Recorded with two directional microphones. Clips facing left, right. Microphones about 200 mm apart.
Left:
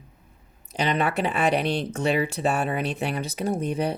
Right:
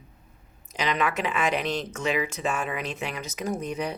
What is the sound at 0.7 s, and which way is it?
Speech, 35° left (ahead or behind).